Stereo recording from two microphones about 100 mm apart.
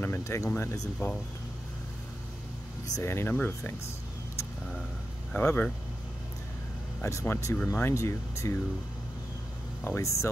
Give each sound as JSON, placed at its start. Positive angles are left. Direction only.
{"t": 0.0, "sound": "speech", "side_deg": 25}
{"t": 0.9, "sound": "speech", "side_deg": 15}
{"t": 2.9, "sound": "speech", "side_deg": 25}
{"t": 5.3, "sound": "speech", "side_deg": 20}
{"t": 7.0, "sound": "speech", "side_deg": 25}
{"t": 9.8, "sound": "speech", "side_deg": 30}